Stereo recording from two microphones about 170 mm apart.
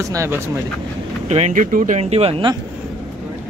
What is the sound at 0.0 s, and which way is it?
Speech, 15° right (ahead or behind).